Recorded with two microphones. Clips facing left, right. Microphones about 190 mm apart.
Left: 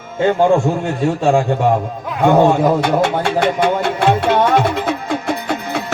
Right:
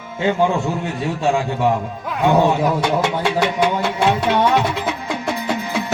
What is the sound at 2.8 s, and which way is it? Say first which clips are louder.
Music: left 3 dB; 50° left (ahead or behind).